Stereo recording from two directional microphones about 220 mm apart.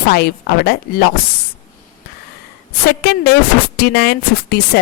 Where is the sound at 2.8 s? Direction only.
45° left (ahead or behind).